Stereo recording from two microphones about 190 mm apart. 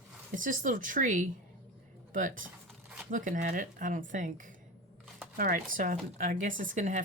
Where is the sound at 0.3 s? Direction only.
45° right (ahead or behind).